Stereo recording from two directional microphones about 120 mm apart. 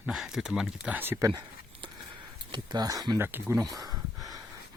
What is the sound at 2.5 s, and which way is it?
Speech, 35° right (ahead or behind).